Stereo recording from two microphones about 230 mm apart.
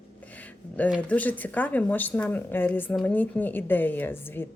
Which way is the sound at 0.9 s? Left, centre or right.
Centre.